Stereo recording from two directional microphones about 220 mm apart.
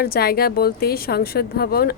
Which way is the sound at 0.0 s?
45° left (ahead or behind).